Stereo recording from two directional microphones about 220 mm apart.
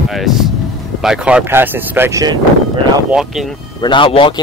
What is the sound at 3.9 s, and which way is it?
Speech, 25° left (ahead or behind).